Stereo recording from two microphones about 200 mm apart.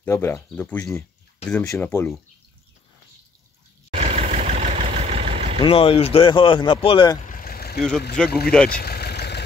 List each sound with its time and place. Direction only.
0.0 s speech: 15° left (ahead or behind)
3.9 s vehicle: 35° right (ahead or behind)
5.6 s speech: 30° left (ahead or behind)
7.2 s vehicle: 45° left (ahead or behind)
8.5 s speech: 5° left (ahead or behind)
8.7 s vehicle: 50° left (ahead or behind)